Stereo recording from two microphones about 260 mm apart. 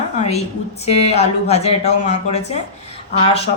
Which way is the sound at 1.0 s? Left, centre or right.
Left.